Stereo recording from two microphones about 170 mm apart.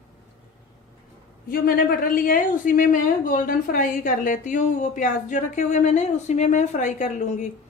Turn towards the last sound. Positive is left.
turn(degrees=45)  # may be behind; listen again after turning